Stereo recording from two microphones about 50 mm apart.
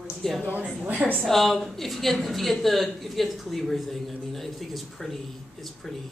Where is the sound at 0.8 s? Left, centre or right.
Right.